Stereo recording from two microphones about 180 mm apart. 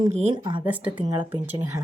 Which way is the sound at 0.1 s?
40° right (ahead or behind).